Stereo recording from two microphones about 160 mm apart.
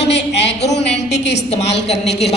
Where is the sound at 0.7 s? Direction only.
90° left.